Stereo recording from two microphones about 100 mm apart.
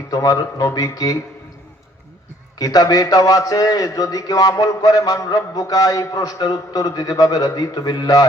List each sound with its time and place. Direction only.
0.1 s a man's voice: 35° left (ahead or behind)
2.6 s a man's voice: 40° left (ahead or behind)